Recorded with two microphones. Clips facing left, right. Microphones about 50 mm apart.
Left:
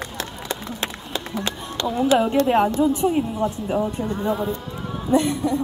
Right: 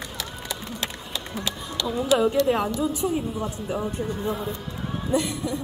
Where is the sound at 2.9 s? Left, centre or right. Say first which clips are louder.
Left 6 dB; left.